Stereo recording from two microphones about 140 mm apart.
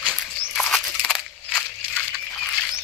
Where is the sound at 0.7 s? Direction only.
5° left (ahead or behind).